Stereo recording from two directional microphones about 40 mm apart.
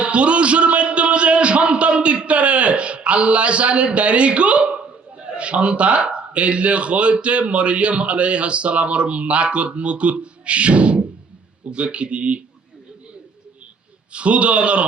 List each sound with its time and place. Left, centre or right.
0.0 s a sound: right
5.3 s speech: right
14.1 s speech: right